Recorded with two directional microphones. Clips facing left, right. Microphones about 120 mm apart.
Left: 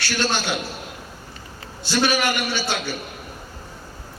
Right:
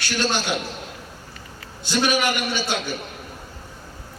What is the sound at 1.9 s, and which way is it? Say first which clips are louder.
Speech: even; 15° right (ahead or behind).